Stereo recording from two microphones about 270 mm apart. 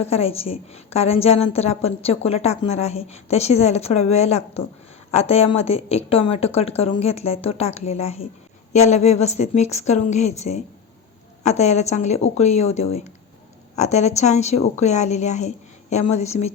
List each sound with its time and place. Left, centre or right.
0.0 s a woman's voice: left